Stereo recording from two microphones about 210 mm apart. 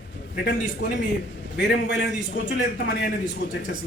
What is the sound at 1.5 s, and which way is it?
A man's voice, 55° left (ahead or behind).